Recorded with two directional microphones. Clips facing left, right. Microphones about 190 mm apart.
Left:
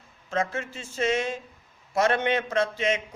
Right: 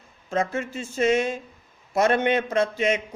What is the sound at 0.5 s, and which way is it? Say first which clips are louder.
Speech: right 5 dB; 50° right (ahead or behind).